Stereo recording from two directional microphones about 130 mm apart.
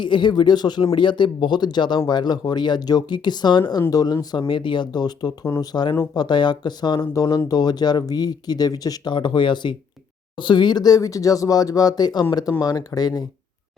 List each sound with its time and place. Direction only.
0.0 s speech: 35° left (ahead or behind)